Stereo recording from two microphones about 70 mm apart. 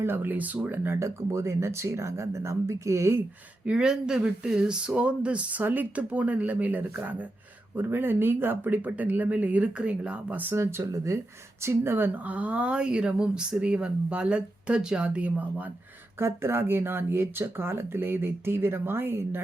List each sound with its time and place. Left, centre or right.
0.0 s speech: right
0.9 s speech: right
3.7 s speech: centre
10.5 s speech: right
16.1 s speech: right